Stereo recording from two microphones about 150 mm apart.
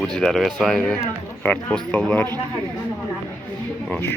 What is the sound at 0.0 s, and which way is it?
Speech, 5° left (ahead or behind).